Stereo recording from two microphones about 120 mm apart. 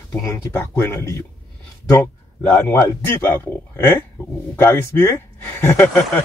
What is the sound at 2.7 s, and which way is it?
Speech, 20° left (ahead or behind).